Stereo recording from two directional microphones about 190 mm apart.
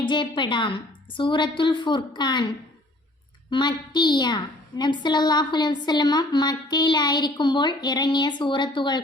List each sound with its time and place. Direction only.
0.0 s a woman's voice: 25° left (ahead or behind)
3.5 s a woman's voice: 25° left (ahead or behind)